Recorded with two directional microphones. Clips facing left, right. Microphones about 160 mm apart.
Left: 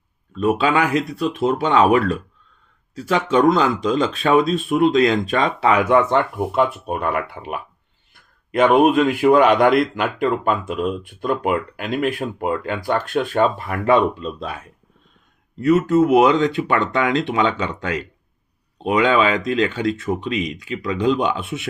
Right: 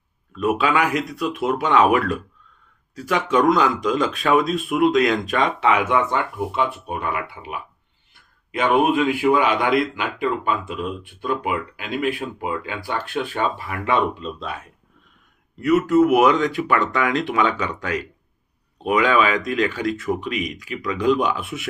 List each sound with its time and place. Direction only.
0.3 s speech: 30° left (ahead or behind)
6.1 s speech: 50° left (ahead or behind)
15.6 s speech: 30° left (ahead or behind)